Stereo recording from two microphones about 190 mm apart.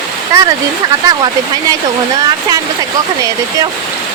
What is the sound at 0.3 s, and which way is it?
Speech, 15° right (ahead or behind).